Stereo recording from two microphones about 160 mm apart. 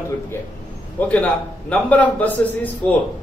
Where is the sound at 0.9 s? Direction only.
10° left (ahead or behind).